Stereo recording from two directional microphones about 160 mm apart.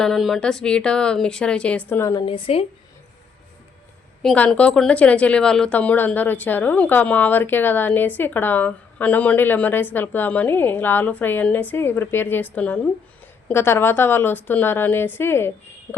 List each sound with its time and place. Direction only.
0.0 s speech: centre (ahead or behind); by 2.2 s 20° left (ahead or behind)
2.2 s speech: 35° left (ahead or behind)
4.2 s a woman's voice: 5° left (ahead or behind)